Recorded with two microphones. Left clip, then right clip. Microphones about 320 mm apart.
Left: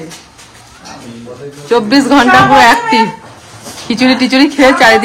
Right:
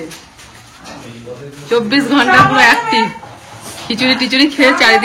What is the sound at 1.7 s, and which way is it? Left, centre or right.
A woman's voice, left.